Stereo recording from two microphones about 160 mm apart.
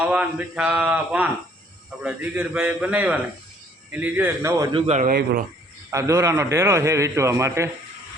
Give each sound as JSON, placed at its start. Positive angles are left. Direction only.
{"t": 0.0, "sound": "a man's voice", "side_deg": -10}
{"t": 4.7, "sound": "a man's voice", "side_deg": -45}
{"t": 5.0, "sound": "speech", "side_deg": -75}
{"t": 5.9, "sound": "a man's voice", "side_deg": -20}